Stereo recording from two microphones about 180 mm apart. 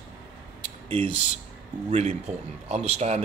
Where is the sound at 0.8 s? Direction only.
30° right (ahead or behind).